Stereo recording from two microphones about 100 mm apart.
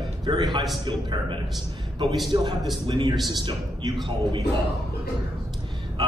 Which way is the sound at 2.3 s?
50° right (ahead or behind).